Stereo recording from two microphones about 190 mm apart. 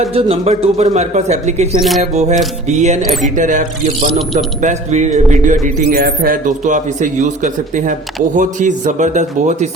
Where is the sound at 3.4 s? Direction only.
40° right (ahead or behind).